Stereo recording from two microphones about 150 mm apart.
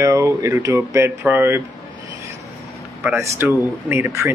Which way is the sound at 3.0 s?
15° right (ahead or behind).